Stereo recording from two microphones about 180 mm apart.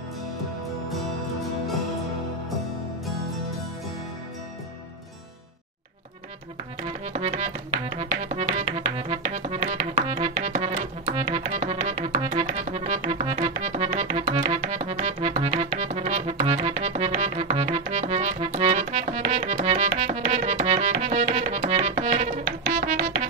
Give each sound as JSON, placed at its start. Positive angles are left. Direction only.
{"t": 6.9, "sound": "music", "side_deg": -40}